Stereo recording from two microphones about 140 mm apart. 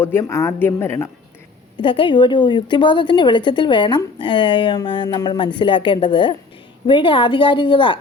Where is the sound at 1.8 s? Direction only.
35° left (ahead or behind).